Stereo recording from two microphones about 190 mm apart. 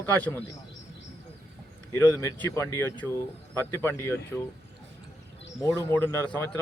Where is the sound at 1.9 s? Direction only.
15° left (ahead or behind).